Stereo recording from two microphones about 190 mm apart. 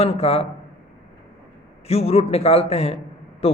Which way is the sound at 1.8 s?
35° left (ahead or behind).